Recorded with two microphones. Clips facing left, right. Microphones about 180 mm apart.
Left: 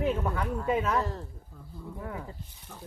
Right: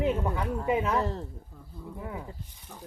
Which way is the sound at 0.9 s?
30° right (ahead or behind).